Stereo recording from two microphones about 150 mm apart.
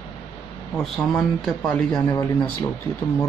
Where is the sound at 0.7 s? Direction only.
5° left (ahead or behind).